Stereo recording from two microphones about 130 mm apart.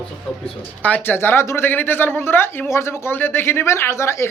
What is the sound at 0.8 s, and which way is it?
Speech, 15° left (ahead or behind).